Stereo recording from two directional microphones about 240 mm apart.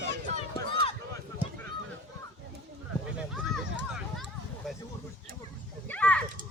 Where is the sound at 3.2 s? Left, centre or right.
Centre.